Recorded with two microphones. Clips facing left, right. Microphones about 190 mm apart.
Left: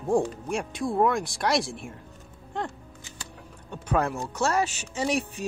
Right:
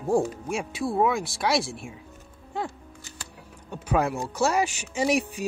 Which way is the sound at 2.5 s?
5° right (ahead or behind).